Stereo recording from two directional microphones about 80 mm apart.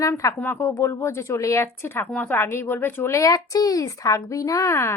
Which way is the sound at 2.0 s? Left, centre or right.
Centre.